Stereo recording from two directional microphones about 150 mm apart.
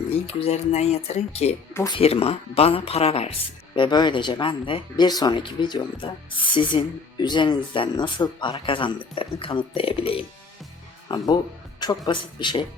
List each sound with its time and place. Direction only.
0.1 s speech: 40° left (ahead or behind)
3.8 s speech: 30° left (ahead or behind)